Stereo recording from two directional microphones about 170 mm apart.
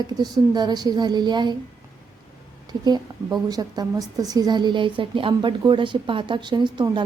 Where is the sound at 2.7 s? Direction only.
25° right (ahead or behind).